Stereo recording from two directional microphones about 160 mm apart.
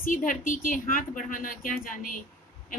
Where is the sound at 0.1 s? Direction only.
55° left (ahead or behind).